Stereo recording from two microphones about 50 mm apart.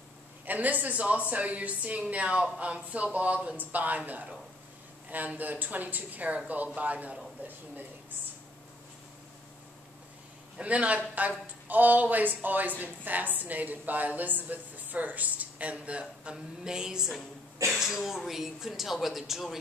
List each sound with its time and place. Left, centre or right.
0.5 s a woman's voice: right
10.6 s speech: right; by 19.6 s centre